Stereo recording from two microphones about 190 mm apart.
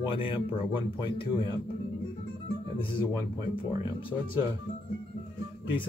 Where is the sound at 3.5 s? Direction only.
25° left (ahead or behind).